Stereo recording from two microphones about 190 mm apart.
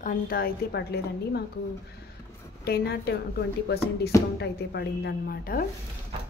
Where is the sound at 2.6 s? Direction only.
55° left (ahead or behind).